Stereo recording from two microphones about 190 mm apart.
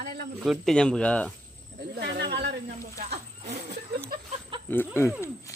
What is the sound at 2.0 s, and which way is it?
Snake, 60° right (ahead or behind).